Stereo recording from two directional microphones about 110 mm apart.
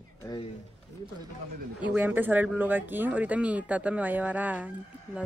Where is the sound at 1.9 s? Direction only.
15° right (ahead or behind).